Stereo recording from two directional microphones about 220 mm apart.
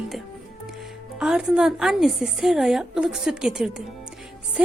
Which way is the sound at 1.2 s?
5° right (ahead or behind).